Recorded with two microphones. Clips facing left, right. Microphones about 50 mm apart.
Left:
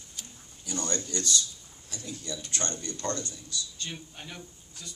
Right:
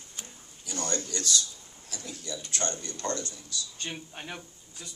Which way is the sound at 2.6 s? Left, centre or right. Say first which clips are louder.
Right 1 dB; right.